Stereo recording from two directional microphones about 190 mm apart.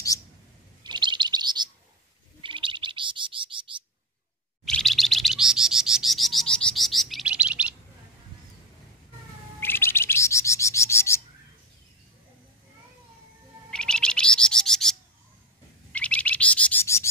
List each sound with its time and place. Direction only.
0.8 s chirp: 25° right (ahead or behind)
2.4 s bird: 25° right (ahead or behind)
4.6 s bird: centre (ahead or behind)
9.6 s bird: 10° left (ahead or behind)
13.7 s bird: 5° left (ahead or behind)